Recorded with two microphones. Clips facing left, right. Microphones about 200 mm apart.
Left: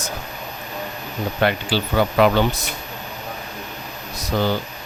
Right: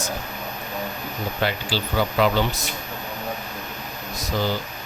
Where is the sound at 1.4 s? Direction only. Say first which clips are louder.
Left 6 dB; 60° left (ahead or behind).